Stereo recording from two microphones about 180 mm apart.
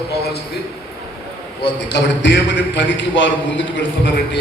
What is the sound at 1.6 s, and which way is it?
A man's voice, 70° left (ahead or behind).